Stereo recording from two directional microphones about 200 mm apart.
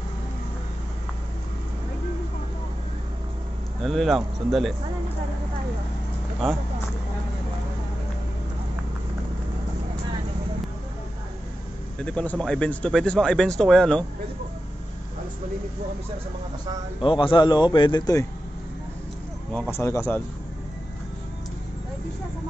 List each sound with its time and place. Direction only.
3.8 s speech: centre (ahead or behind)
6.4 s speech: centre (ahead or behind)
12.0 s speech: 5° left (ahead or behind)
17.0 s a man's voice: 25° left (ahead or behind)
19.7 s speech: 15° left (ahead or behind)